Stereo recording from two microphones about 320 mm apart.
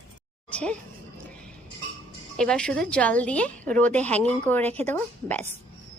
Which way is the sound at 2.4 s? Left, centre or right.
Centre.